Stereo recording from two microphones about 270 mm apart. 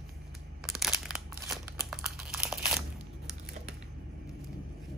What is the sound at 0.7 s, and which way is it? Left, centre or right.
Crumpling, centre.